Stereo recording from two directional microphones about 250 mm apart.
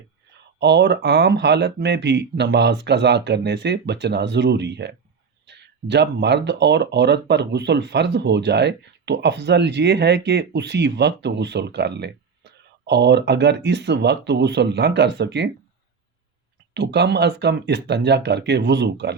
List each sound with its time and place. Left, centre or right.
0.6 s speech: right
16.7 s speech: right